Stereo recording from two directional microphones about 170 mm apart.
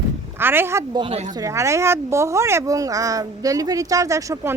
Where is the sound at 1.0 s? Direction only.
35° right (ahead or behind).